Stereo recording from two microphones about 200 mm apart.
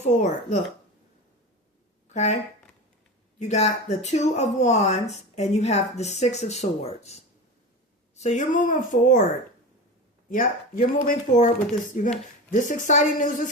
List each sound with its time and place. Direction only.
0.0 s speech: 35° left (ahead or behind)
2.1 s speech: 35° left (ahead or behind)
10.2 s speech: 45° left (ahead or behind)